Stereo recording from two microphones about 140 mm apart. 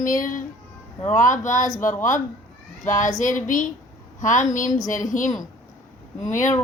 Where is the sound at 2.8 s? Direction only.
65° left (ahead or behind).